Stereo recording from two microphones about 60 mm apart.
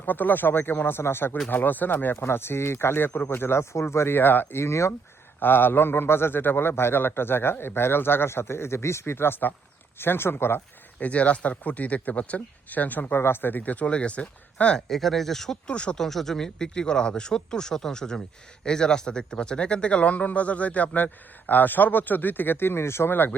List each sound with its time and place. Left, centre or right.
0.0 s a man's voice: left
5.4 s a man's voice: left
11.0 s speech: left
13.1 s speech: left; by 14.8 s centre
14.8 s speech: centre
16.0 s speech: centre; by 23.4 s left